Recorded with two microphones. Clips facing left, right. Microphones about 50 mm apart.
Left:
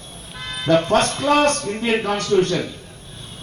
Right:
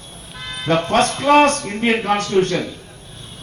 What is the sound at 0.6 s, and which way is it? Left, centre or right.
A man's voice, right.